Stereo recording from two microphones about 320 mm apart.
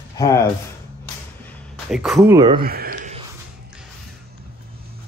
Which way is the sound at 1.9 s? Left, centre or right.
Centre.